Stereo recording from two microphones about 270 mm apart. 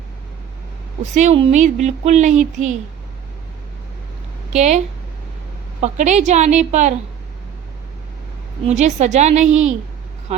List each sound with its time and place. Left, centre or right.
1.0 s speech: right
4.5 s speech: right
5.8 s speech: right
8.6 s speech: right